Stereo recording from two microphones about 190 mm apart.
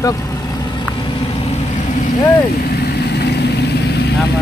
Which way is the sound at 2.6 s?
55° left (ahead or behind).